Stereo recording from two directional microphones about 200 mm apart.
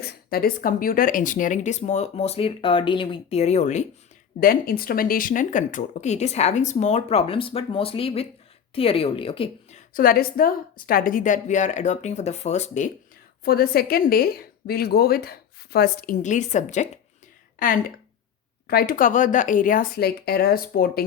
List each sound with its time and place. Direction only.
0.0 s a woman's voice: 50° left (ahead or behind); by 3.8 s 35° left (ahead or behind)
4.4 s a woman's voice: 45° left (ahead or behind)
13.4 s a woman's voice: 50° left (ahead or behind)
16.2 s a woman's voice: 35° left (ahead or behind)